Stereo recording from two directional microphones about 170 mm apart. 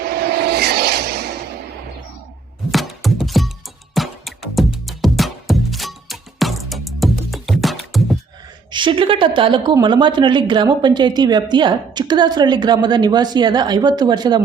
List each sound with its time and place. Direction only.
0.0 s vehicle: 65° right (ahead or behind)
2.7 s music: centre (ahead or behind)
8.7 s speech: 30° right (ahead or behind)